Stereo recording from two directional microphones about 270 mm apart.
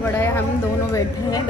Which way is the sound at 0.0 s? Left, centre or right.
Centre.